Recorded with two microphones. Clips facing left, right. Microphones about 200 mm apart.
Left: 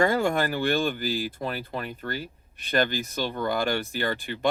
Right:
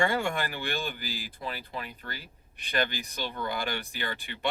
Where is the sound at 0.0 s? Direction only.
40° left (ahead or behind).